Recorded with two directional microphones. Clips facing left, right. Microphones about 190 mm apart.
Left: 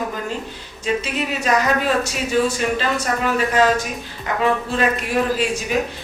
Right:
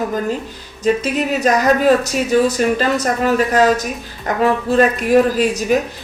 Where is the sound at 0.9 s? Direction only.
40° right (ahead or behind).